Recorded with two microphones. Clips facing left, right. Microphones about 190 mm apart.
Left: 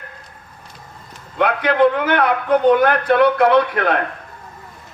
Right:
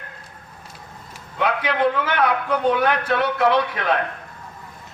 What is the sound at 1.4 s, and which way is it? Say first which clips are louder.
A man's voice: left 6 dB; 55° left (ahead or behind).